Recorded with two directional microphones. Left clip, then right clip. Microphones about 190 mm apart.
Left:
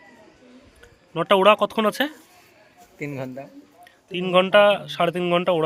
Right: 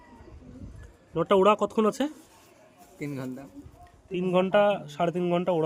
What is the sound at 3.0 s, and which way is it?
Speech, 40° left (ahead or behind).